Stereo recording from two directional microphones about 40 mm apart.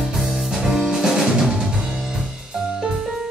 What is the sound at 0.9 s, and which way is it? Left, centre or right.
Music, centre.